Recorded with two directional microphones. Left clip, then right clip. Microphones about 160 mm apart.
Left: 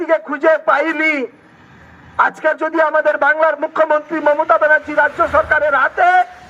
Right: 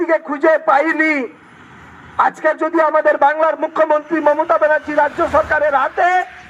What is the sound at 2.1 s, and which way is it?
Speech, 25° right (ahead or behind).